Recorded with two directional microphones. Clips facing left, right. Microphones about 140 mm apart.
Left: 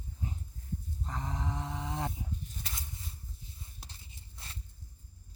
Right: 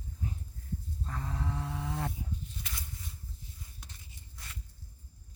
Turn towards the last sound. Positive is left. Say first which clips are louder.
# even
turn(degrees=30)  # may be behind; listen again after turning